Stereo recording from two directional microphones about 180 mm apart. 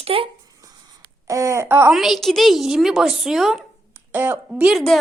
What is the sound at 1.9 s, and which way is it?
A woman's voice, centre (ahead or behind).